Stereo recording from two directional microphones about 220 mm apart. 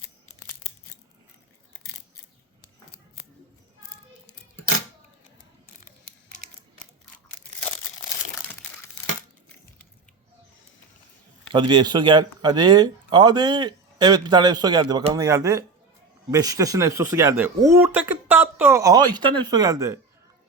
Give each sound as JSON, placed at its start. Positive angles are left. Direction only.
{"t": 11.5, "sound": "a man's voice", "side_deg": -20}